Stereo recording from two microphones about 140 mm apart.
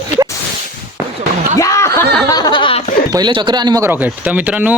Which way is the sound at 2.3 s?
30° left (ahead or behind).